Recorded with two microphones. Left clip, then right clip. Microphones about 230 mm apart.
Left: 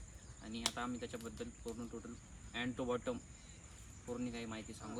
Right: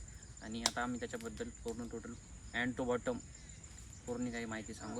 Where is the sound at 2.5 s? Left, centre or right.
Centre.